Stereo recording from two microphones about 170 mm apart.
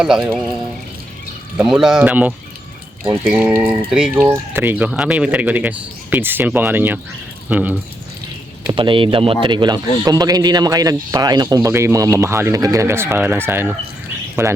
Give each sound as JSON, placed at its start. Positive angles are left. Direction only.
{"t": 0.0, "sound": "speech", "side_deg": -5}
{"t": 1.5, "sound": "speech", "side_deg": -5}
{"t": 8.7, "sound": "a man's voice", "side_deg": -30}